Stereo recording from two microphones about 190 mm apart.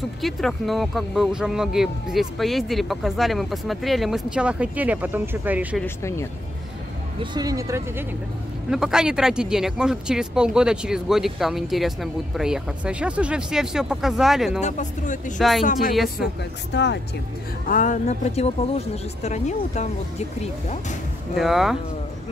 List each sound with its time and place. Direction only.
0.2 s speech: centre (ahead or behind)
7.2 s speech: 20° right (ahead or behind)
8.6 s speech: 5° right (ahead or behind)
14.6 s speech: 40° left (ahead or behind)
15.3 s speech: centre (ahead or behind)
15.6 s speech: 45° left (ahead or behind)
15.9 s speech: centre (ahead or behind)
16.7 s speech: 65° left (ahead or behind)
17.6 s speech: 45° left (ahead or behind)
21.4 s speech: centre (ahead or behind)